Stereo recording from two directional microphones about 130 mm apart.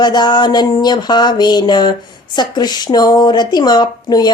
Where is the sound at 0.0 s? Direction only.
35° left (ahead or behind).